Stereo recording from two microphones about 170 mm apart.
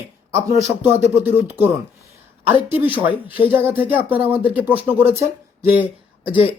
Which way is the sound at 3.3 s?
30° left (ahead or behind).